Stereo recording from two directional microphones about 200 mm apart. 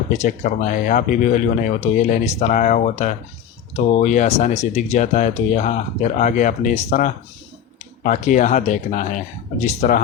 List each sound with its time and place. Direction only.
0.1 s speech: 40° left (ahead or behind)